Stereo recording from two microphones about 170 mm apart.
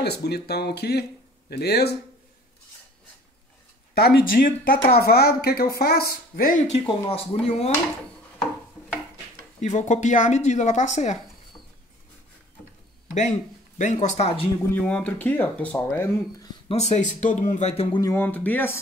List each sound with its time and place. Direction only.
0.0 s speech: 70° left (ahead or behind)
3.9 s speech: 65° left (ahead or behind); by 6.8 s 50° left (ahead or behind)
6.9 s speech: 35° left (ahead or behind)
9.6 s speech: 45° left (ahead or behind)
13.1 s speech: 45° left (ahead or behind)
14.7 s speech: 10° left (ahead or behind)
16.6 s speech: 40° left (ahead or behind)
18.0 s speech: 15° left (ahead or behind)